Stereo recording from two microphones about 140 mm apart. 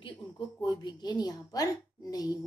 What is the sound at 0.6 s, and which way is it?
A woman's voice, 30° left (ahead or behind).